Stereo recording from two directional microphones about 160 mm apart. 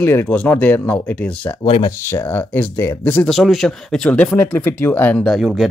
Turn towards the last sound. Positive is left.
turn(degrees=0)  # may be behind; listen again after turning